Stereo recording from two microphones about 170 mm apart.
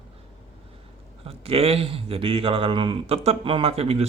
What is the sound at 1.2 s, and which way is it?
Speech, 35° right (ahead or behind).